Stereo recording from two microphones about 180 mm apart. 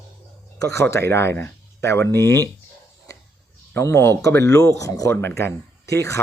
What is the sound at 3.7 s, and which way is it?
Speech, 15° left (ahead or behind).